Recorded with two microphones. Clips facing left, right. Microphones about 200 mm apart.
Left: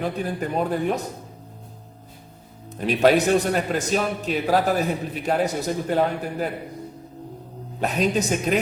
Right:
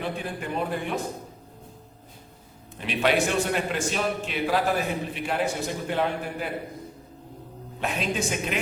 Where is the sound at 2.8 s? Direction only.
40° left (ahead or behind).